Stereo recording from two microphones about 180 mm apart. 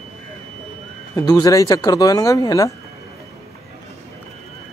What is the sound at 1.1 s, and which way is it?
Speech, 20° left (ahead or behind).